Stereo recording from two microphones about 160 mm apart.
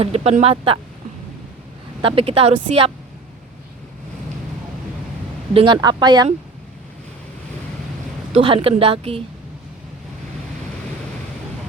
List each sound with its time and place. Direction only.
0.0 s speech: 40° right (ahead or behind)
2.0 s speech: 35° right (ahead or behind)
5.5 s speech: 30° right (ahead or behind)
8.3 s speech: 35° right (ahead or behind)